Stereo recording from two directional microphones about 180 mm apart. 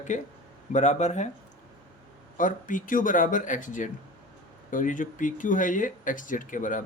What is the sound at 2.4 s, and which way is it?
Speech, 45° left (ahead or behind).